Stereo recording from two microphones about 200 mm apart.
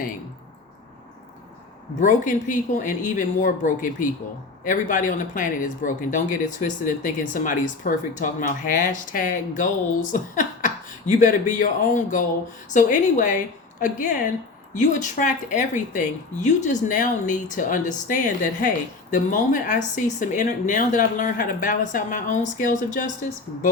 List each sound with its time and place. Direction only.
2.0 s a woman's voice: 40° left (ahead or behind)